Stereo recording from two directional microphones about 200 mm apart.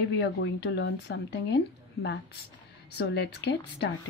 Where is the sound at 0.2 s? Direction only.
60° left (ahead or behind).